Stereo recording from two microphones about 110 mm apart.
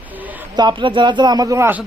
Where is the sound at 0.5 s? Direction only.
45° right (ahead or behind).